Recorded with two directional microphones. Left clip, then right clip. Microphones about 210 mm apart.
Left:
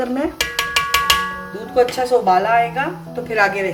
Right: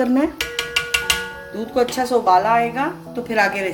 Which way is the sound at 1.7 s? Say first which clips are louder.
Left 3 dB; 40° right (ahead or behind).